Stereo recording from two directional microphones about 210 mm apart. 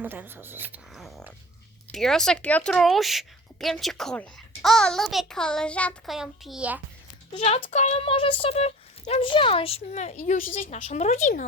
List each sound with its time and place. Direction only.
0.0 s a woman's voice: 10° right (ahead or behind)
7.3 s speech: 30° left (ahead or behind)